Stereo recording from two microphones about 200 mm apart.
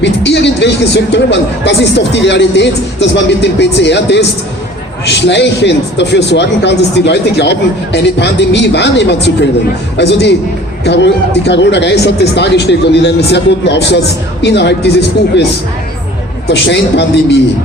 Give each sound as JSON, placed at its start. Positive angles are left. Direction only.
{"t": 0.0, "sound": "speech", "side_deg": 60}
{"t": 16.5, "sound": "speech", "side_deg": 60}